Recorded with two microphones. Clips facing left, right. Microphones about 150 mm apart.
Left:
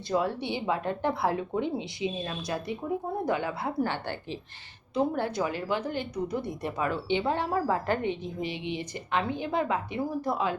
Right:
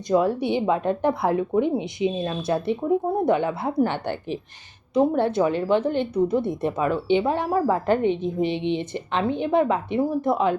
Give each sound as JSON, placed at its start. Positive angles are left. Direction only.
{"t": 0.4, "sound": "a woman's voice", "side_deg": -20}